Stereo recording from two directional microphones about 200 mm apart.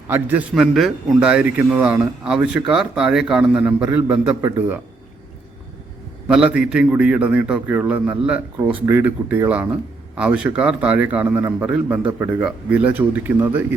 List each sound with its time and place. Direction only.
0.1 s a man's voice: 10° right (ahead or behind)
6.2 s a man's voice: 5° right (ahead or behind)